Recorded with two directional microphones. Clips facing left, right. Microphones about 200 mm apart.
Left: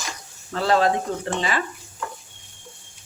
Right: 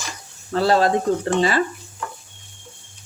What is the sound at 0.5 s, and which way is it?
Speech, 35° right (ahead or behind).